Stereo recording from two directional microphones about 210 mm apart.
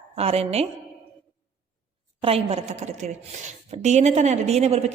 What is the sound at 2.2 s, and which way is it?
A woman's voice, 30° right (ahead or behind).